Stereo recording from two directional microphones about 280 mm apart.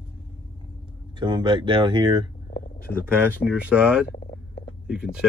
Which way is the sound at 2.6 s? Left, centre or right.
Left.